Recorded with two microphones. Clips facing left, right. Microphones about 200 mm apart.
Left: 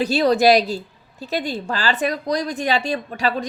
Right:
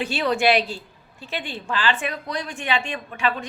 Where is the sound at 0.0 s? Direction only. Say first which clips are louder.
Left 6 dB; 40° left (ahead or behind).